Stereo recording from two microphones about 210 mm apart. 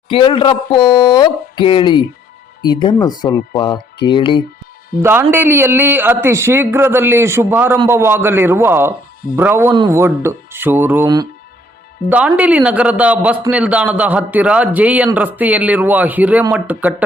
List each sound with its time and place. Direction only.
0.1 s speech: 25° left (ahead or behind)
5.0 s a man's voice: 10° right (ahead or behind)
12.0 s a man's voice: 5° right (ahead or behind)